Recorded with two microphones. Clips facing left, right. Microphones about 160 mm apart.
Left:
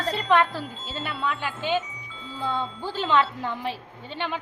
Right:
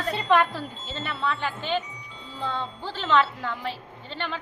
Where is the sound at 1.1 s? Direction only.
10° left (ahead or behind).